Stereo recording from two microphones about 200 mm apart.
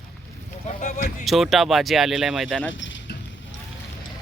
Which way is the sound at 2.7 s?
70° left (ahead or behind).